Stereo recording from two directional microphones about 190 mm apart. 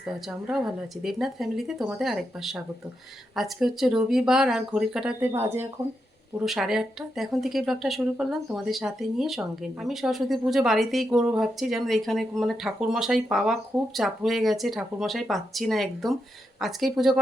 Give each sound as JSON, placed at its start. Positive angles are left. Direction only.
{"t": 0.0, "sound": "speech", "side_deg": -5}
{"t": 6.4, "sound": "speech", "side_deg": 0}